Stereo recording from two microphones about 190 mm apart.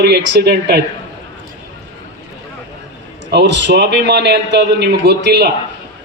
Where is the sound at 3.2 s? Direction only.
65° right (ahead or behind).